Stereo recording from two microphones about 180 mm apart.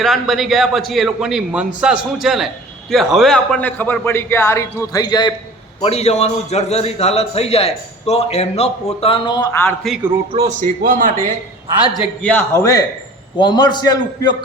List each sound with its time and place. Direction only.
0.0 s a man's voice: centre (ahead or behind); by 5.3 s 25° left (ahead or behind)
5.8 s a man's voice: 35° left (ahead or behind); by 9.7 s 20° left (ahead or behind)
10.3 s a man's voice: 40° right (ahead or behind)
11.9 s a man's voice: 5° left (ahead or behind)
13.3 s a man's voice: 25° left (ahead or behind)